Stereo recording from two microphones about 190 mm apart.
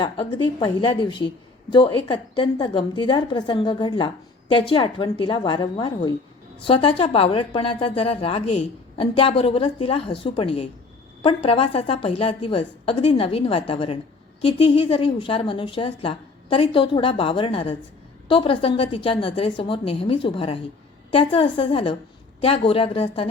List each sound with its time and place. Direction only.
0.0 s a woman's voice: 25° left (ahead or behind)